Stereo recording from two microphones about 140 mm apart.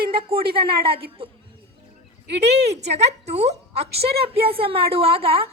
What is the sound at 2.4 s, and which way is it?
A woman's voice, 50° right (ahead or behind).